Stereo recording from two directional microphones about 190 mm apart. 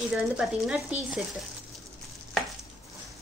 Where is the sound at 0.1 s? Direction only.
5° right (ahead or behind).